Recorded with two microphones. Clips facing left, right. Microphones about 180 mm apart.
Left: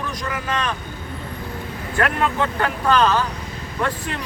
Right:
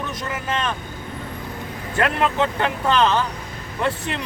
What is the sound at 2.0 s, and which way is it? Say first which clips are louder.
Speech: right 1 dB; 25° right (ahead or behind).